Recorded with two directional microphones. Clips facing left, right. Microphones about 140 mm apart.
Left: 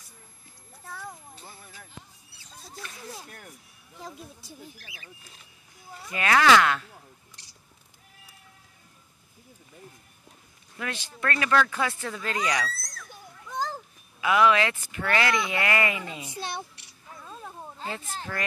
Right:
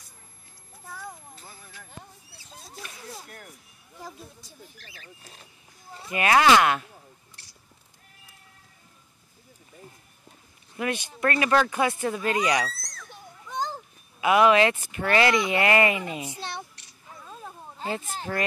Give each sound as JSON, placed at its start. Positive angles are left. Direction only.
{"t": 0.8, "sound": "children playing", "side_deg": 0}
{"t": 4.4, "sound": "speech", "side_deg": 10}
{"t": 5.2, "sound": "speech", "side_deg": -40}
{"t": 5.9, "sound": "speech", "side_deg": -20}
{"t": 10.8, "sound": "speech", "side_deg": -20}
{"t": 12.8, "sound": "children playing", "side_deg": 0}
{"t": 14.2, "sound": "speech", "side_deg": -20}
{"t": 16.3, "sound": "a child's voice", "side_deg": 15}
{"t": 17.1, "sound": "a sound", "side_deg": -5}
{"t": 17.8, "sound": "speech", "side_deg": -25}